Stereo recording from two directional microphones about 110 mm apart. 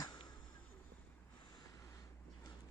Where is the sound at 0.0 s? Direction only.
40° left (ahead or behind).